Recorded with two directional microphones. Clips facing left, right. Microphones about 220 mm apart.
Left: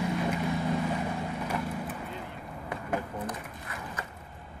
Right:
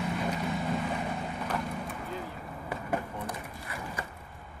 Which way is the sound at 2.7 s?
10° right (ahead or behind).